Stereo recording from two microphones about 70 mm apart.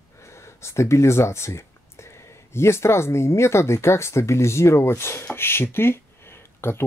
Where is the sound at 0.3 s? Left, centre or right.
Left.